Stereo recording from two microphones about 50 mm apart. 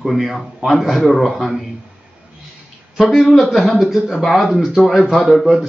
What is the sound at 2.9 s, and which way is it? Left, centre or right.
Speech, centre.